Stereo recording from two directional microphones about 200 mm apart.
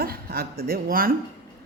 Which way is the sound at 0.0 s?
50° right (ahead or behind).